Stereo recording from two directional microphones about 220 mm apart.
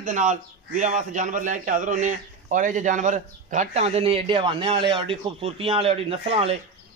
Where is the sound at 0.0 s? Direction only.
35° right (ahead or behind).